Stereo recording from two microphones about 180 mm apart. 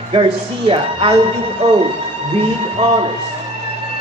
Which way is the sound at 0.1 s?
30° right (ahead or behind).